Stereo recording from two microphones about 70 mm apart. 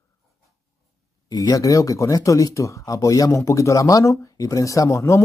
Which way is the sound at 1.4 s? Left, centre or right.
Left.